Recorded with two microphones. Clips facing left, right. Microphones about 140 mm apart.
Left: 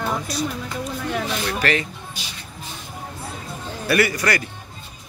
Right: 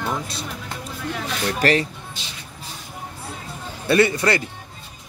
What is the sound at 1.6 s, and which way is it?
Speech, 35° right (ahead or behind).